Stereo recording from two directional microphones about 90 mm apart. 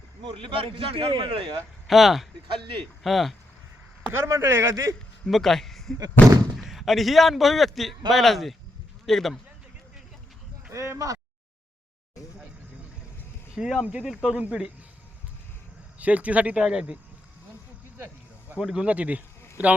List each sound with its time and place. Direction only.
0.4 s a man's voice: 85° right
1.9 s speech: centre (ahead or behind)
2.5 s speech: 70° right (ahead or behind)
3.0 s speech: centre (ahead or behind)
4.1 s speech: 30° right (ahead or behind)
5.2 s a man's voice: 5° left (ahead or behind)
10.7 s speech: 30° right (ahead or behind)
13.8 s speech: 10° right (ahead or behind)
16.0 s speech: 15° right (ahead or behind)
17.9 s snake: 25° right (ahead or behind)
18.6 s speech: 10° right (ahead or behind)